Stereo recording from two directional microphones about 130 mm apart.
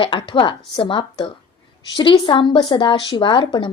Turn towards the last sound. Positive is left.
turn(degrees=40)  # may be behind; listen again after turning